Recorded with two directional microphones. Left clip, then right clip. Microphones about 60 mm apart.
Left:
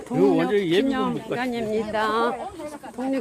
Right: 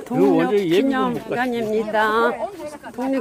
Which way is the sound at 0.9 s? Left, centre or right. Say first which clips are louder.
Right 4 dB; right.